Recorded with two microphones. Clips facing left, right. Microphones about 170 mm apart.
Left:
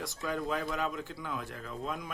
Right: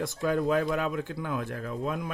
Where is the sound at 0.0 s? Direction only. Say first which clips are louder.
Right 8 dB; 55° right (ahead or behind).